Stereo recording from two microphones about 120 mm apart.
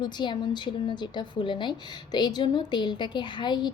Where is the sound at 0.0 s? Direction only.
40° left (ahead or behind).